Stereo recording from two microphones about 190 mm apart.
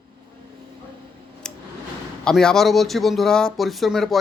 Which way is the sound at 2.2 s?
5° left (ahead or behind).